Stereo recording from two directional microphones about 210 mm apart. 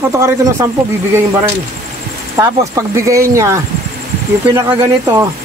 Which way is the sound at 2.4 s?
15° right (ahead or behind).